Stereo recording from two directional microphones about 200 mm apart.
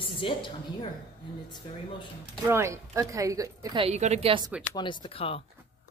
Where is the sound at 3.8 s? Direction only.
35° right (ahead or behind).